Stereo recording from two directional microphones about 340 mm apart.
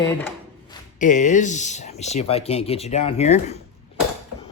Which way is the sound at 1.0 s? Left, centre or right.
Left.